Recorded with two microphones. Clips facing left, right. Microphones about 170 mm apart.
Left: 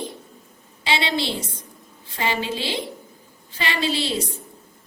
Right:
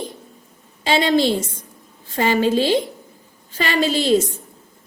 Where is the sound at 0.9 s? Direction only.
45° right (ahead or behind).